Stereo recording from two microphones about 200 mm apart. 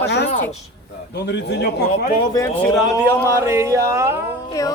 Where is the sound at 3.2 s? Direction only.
15° right (ahead or behind).